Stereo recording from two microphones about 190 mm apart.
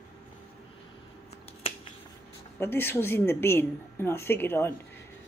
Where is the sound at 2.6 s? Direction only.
10° left (ahead or behind).